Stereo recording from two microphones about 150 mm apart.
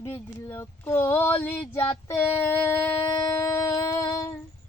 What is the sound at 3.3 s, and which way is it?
Music, 20° left (ahead or behind).